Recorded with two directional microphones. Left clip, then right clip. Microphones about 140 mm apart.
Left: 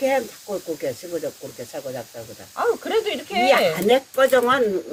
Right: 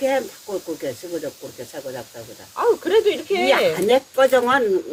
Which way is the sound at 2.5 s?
45° right (ahead or behind).